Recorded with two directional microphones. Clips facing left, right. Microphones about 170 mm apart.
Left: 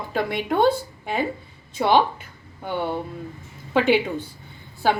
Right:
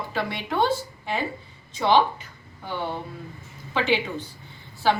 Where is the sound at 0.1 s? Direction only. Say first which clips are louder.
Left 7 dB; 50° left (ahead or behind).